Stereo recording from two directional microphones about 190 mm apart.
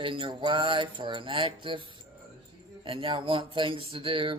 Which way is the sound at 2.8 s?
30° right (ahead or behind).